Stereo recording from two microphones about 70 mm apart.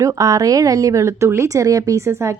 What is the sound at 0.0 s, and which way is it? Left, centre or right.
A woman's voice, right.